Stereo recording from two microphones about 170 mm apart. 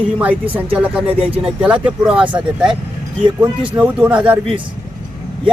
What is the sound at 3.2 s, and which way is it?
Speech, 30° right (ahead or behind).